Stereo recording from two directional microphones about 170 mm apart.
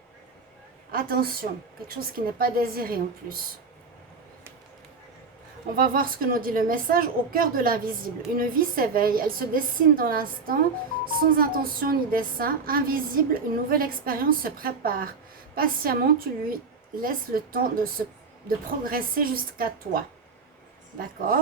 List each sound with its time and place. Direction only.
0.9 s a woman's voice: 60° right (ahead or behind)
5.7 s a woman's voice: 60° right (ahead or behind)